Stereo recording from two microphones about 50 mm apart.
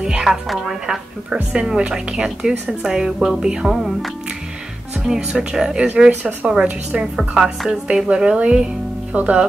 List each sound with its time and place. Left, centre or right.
0.2 s a woman's voice: centre
1.8 s a woman's voice: centre
5.0 s a woman's voice: centre
9.1 s speech: right